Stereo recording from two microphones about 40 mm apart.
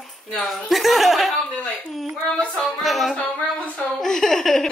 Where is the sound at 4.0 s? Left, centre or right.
Centre.